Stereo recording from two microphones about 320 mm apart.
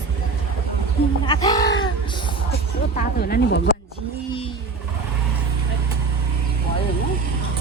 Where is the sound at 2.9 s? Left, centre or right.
Left.